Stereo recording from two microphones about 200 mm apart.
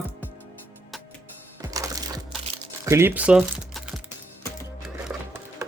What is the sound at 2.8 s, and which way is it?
Speech, 10° right (ahead or behind).